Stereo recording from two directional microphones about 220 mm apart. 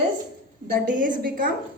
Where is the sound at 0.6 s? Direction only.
40° right (ahead or behind).